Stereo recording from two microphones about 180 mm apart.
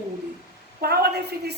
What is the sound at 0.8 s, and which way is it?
Speech, 60° right (ahead or behind).